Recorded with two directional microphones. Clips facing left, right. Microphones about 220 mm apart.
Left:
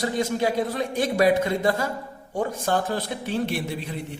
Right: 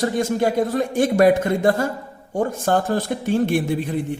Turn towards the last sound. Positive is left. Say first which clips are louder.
# right 8 dB
turn(degrees=-50)  # may be behind; listen again after turning